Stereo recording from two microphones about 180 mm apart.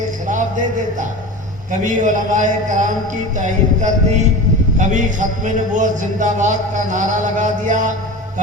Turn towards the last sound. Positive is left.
turn(degrees=-45)  # may be behind; listen again after turning